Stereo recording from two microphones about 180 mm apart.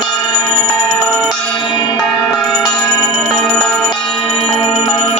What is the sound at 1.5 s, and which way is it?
Music, 25° left (ahead or behind).